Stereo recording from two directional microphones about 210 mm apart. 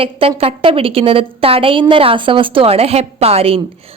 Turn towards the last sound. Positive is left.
turn(degrees=-30)  # may be behind; listen again after turning